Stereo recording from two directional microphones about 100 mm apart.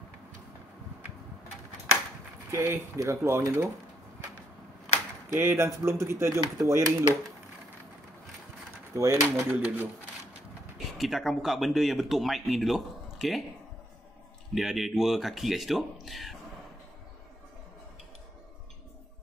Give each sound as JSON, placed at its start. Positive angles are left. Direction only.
{"t": 2.5, "sound": "speech", "side_deg": -30}
{"t": 5.4, "sound": "speech", "side_deg": -25}
{"t": 8.9, "sound": "speech", "side_deg": -30}
{"t": 10.9, "sound": "speech", "side_deg": 0}
{"t": 14.5, "sound": "speech", "side_deg": 0}